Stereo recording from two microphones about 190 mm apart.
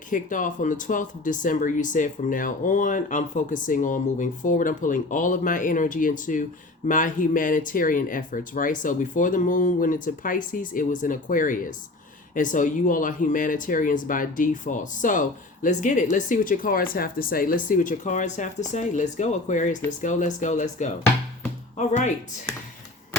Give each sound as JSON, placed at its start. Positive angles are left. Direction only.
{"t": 0.1, "sound": "speech", "side_deg": 45}